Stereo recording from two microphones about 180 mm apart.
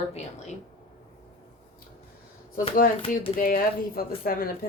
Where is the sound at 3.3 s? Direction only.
50° left (ahead or behind).